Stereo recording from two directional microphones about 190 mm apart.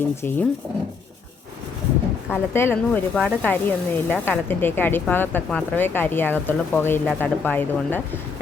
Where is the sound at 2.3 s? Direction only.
10° left (ahead or behind).